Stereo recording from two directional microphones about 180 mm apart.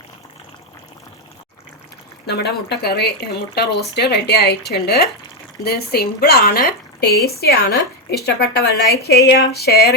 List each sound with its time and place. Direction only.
2.2 s speech: 65° left (ahead or behind)